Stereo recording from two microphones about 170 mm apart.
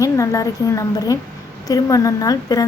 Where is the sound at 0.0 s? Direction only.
20° left (ahead or behind).